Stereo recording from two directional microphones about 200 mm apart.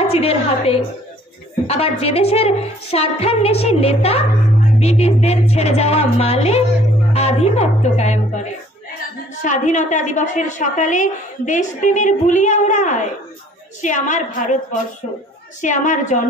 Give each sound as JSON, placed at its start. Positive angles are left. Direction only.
{"t": 0.0, "sound": "a woman's voice", "side_deg": 30}